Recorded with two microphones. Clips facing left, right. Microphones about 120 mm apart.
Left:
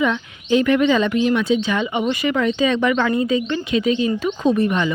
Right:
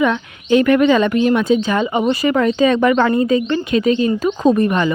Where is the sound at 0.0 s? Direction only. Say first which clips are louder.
Right 3 dB; 60° right (ahead or behind).